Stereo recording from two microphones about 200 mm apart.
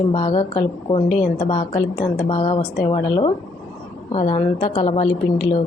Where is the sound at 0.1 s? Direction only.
25° left (ahead or behind).